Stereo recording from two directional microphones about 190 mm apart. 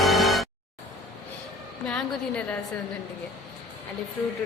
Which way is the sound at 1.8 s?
5° left (ahead or behind).